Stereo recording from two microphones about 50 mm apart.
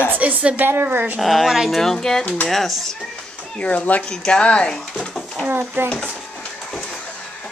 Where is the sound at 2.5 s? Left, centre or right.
Centre.